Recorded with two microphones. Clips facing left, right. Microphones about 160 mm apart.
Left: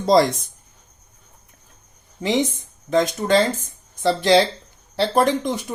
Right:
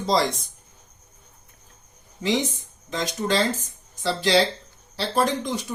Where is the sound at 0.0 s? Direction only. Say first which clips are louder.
Left 6 dB; 55° left (ahead or behind).